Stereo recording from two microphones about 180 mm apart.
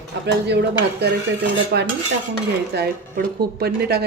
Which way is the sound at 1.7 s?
65° right (ahead or behind).